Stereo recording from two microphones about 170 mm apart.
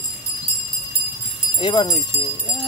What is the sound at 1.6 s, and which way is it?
Speech, 25° left (ahead or behind).